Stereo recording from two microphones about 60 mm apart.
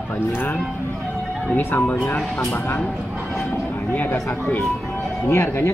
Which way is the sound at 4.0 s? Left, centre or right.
Left.